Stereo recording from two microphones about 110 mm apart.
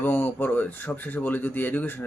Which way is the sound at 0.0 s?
15° left (ahead or behind).